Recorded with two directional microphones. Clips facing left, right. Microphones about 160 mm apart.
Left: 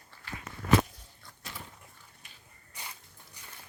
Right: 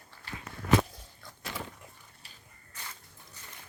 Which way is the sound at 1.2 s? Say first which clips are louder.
Right 6 dB; 90° right.